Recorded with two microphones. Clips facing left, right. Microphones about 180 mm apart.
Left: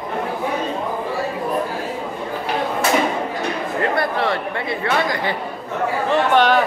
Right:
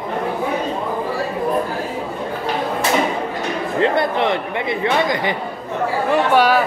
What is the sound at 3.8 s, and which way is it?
Speech, 20° right (ahead or behind).